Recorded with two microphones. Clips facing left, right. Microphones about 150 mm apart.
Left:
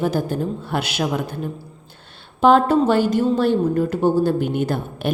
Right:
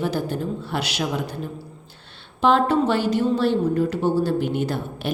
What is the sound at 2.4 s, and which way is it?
A woman's voice, 45° left (ahead or behind).